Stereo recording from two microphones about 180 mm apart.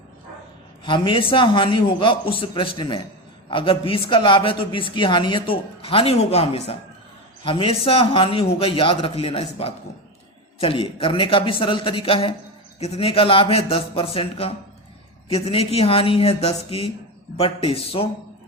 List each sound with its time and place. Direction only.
0.9 s speech: 25° left (ahead or behind)